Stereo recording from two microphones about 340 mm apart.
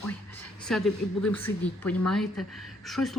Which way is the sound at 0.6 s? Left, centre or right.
Centre.